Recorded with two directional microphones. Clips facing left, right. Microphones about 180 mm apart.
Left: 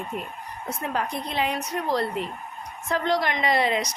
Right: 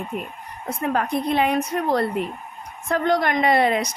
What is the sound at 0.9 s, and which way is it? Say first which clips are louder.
A woman's voice: right 7 dB; 55° right (ahead or behind).